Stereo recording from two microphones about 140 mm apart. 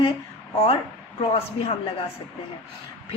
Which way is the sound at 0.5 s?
45° left (ahead or behind).